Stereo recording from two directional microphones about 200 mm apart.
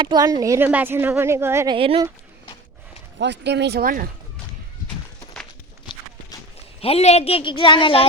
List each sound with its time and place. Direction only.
0.0 s speech: 20° right (ahead or behind)
1.7 s speech: 25° right (ahead or behind)
3.2 s speech: 60° right (ahead or behind)
6.8 s a woman's voice: 30° left (ahead or behind)